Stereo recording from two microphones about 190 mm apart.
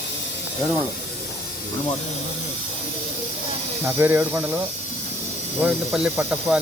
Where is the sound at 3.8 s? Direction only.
10° right (ahead or behind).